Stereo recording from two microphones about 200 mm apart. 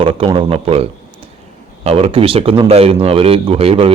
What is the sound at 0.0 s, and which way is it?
Speech, 25° right (ahead or behind).